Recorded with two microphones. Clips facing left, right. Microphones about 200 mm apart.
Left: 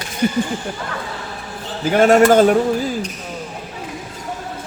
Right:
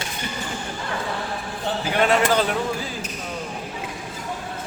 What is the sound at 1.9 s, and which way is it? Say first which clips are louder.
Speech: left 9 dB; 45° left (ahead or behind).